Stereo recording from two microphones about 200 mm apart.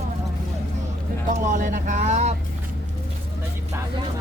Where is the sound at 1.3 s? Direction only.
40° right (ahead or behind).